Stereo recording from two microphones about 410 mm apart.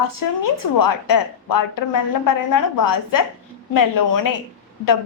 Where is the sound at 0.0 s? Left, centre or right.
Left.